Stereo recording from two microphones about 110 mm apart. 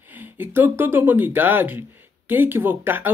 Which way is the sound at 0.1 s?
20° right (ahead or behind).